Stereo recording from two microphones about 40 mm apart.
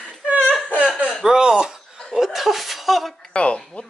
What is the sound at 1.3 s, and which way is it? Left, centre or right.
Speech, centre.